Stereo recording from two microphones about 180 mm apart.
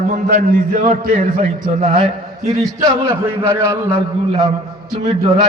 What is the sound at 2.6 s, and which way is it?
A man's voice, 15° right (ahead or behind).